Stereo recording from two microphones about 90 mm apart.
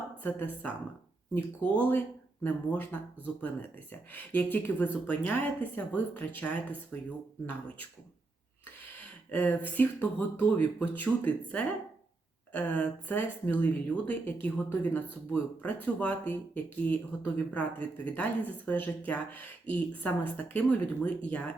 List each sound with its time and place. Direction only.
0.2 s speech: 20° left (ahead or behind)
4.1 s speech: 20° left (ahead or behind)
9.3 s speech: 20° left (ahead or behind)